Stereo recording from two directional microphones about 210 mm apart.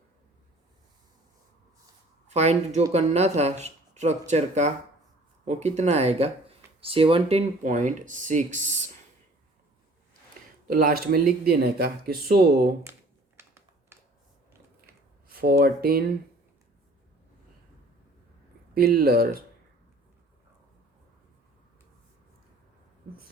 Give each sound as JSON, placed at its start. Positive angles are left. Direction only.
{"t": 2.2, "sound": "speech", "side_deg": -30}
{"t": 10.7, "sound": "speech", "side_deg": -45}
{"t": 12.8, "sound": "computer keyboard", "side_deg": -10}
{"t": 15.3, "sound": "speech", "side_deg": -45}
{"t": 18.7, "sound": "speech", "side_deg": -45}